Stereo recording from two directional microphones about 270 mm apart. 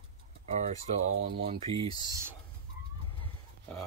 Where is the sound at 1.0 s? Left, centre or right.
Right.